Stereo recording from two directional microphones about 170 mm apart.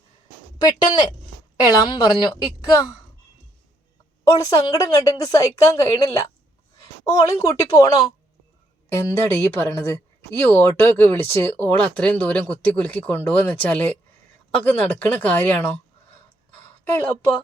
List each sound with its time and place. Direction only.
0.6 s a woman's voice: 25° left (ahead or behind)
4.2 s a woman's voice: 20° left (ahead or behind)
9.0 s speech: 15° left (ahead or behind)
16.5 s a sound: 10° left (ahead or behind)